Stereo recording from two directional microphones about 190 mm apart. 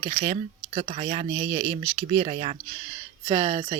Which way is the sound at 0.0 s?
30° right (ahead or behind).